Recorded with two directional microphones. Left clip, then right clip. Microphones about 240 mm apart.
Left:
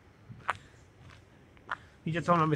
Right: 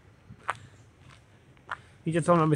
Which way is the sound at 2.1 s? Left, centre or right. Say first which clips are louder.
Right 3 dB; centre.